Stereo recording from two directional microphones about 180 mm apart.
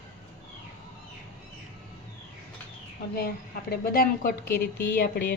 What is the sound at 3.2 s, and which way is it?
Speech, 55° left (ahead or behind).